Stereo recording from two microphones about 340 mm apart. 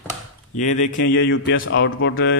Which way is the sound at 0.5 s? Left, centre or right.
Left.